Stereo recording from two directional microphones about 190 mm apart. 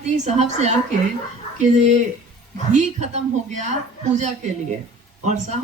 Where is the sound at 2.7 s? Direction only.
35° right (ahead or behind).